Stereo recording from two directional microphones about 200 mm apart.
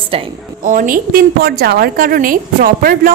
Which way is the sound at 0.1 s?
30° right (ahead or behind).